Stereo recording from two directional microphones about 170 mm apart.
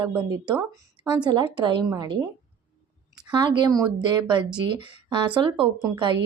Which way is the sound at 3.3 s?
25° right (ahead or behind).